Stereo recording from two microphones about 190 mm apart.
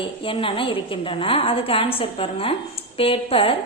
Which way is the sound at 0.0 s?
30° left (ahead or behind).